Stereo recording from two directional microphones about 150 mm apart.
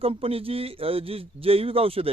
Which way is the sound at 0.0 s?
40° right (ahead or behind).